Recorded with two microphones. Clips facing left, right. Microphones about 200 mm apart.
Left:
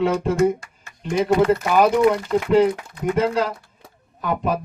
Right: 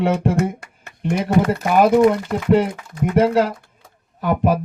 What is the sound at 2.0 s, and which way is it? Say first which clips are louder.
Speech: right 2 dB; 50° right (ahead or behind).